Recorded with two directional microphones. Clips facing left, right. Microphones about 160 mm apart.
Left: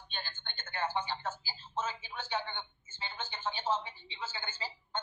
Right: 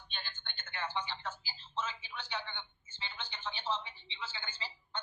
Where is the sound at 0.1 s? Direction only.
45° left (ahead or behind).